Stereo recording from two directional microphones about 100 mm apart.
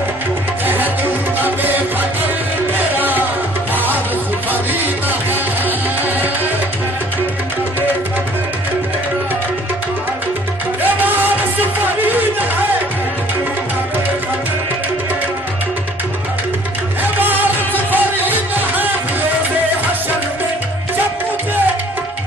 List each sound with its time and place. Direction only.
0.7 s music: 20° right (ahead or behind)
10.8 s music: 20° right (ahead or behind)
17.2 s music: 20° right (ahead or behind)